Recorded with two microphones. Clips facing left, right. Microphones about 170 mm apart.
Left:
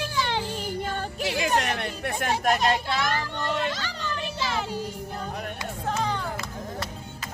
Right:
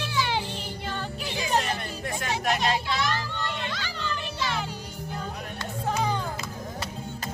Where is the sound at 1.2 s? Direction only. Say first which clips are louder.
Left 3 dB; 70° left (ahead or behind); by 3.2 s 50° left (ahead or behind).